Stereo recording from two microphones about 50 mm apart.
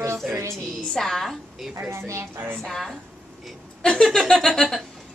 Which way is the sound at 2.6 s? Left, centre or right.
Centre.